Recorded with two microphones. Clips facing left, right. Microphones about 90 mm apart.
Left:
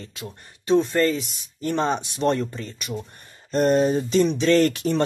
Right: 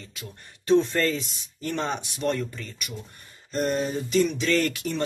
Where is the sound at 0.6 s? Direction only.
10° left (ahead or behind).